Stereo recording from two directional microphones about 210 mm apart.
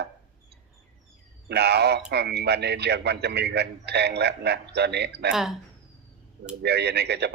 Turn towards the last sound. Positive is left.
turn(degrees=-50)  # may be behind; listen again after turning